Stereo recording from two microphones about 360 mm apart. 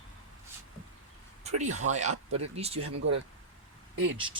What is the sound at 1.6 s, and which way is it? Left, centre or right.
Speech, centre.